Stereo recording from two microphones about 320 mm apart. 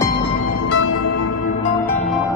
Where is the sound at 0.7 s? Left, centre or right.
Left.